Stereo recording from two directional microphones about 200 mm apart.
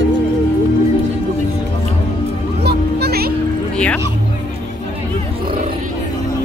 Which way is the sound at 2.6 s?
50° right (ahead or behind).